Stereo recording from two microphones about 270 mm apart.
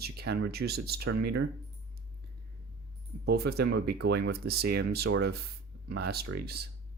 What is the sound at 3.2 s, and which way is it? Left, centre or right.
Speech, right.